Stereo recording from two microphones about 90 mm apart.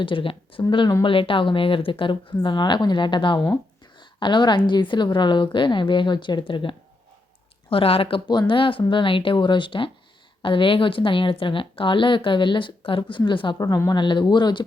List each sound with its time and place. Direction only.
0.0 s a woman's voice: 75° left (ahead or behind)
0.7 s a woman's voice: 65° left (ahead or behind)
1.0 s a woman's voice: 75° left (ahead or behind); by 6.4 s 60° left (ahead or behind)
6.5 s a woman's voice: 70° left (ahead or behind)
7.7 s speech: 90° left
8.3 s a woman's voice: 65° left (ahead or behind)
13.6 s a woman's voice: 40° left (ahead or behind)
13.9 s a woman's voice: 60° left (ahead or behind)